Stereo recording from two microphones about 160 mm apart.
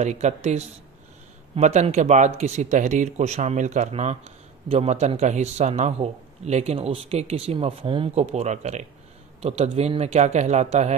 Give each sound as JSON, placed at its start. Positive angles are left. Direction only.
{"t": 0.0, "sound": "a man's voice", "side_deg": -45}